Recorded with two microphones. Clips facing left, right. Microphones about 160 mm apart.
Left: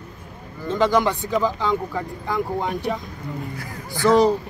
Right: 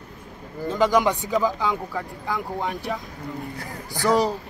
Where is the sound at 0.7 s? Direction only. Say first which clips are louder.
Left 1 dB; 10° right (ahead or behind).